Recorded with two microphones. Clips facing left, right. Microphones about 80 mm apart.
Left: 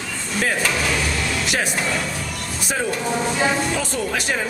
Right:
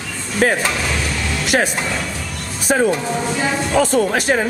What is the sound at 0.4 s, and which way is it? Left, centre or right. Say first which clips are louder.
Speech: right 7 dB; right.